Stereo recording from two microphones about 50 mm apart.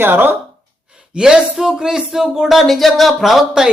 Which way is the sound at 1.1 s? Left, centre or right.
Centre.